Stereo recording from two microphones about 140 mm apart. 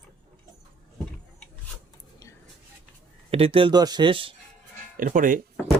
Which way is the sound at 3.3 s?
45° right (ahead or behind).